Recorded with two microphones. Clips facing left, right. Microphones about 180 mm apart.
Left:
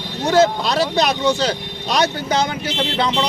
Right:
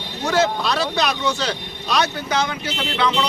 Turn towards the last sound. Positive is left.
turn(degrees=35)  # may be behind; listen again after turning